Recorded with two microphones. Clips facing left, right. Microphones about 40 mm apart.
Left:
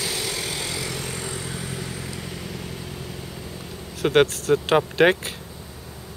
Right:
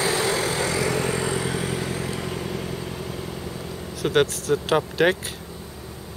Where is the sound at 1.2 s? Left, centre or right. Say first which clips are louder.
Right 7 dB; right.